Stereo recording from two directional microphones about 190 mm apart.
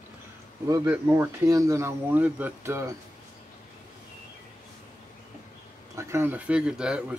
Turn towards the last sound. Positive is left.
turn(degrees=-5)  # may be behind; listen again after turning